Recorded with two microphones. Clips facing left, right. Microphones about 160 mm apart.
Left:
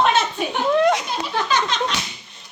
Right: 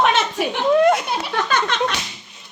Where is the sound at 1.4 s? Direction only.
55° right (ahead or behind).